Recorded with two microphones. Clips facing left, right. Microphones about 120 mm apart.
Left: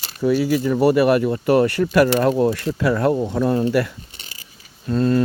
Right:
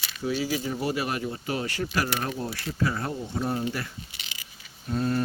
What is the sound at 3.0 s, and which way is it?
Speech, 90° left.